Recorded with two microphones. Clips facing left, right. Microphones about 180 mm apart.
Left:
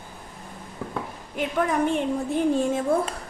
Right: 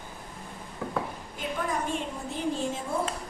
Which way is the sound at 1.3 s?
70° left (ahead or behind).